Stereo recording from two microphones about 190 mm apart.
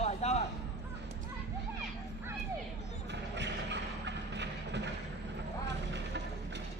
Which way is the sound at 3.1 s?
65° right (ahead or behind).